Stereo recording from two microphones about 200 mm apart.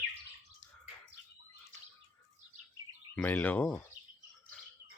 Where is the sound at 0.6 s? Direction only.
70° left (ahead or behind).